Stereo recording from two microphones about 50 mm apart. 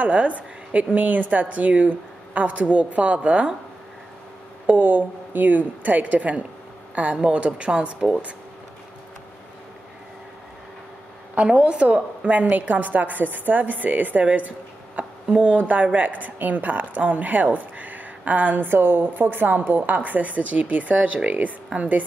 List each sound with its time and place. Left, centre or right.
0.0 s a woman's voice: right
4.6 s a woman's voice: right
11.3 s a woman's voice: right
15.6 s a woman's voice: right